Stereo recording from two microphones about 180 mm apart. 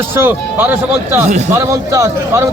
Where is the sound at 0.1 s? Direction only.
10° right (ahead or behind).